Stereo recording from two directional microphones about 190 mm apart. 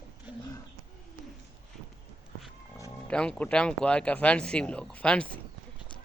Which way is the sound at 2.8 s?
5° left (ahead or behind).